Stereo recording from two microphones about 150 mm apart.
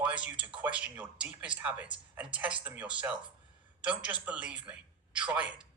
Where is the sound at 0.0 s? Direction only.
10° right (ahead or behind).